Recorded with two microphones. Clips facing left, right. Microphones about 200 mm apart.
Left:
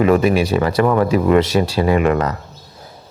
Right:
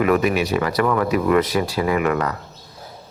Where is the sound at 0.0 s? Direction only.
30° left (ahead or behind).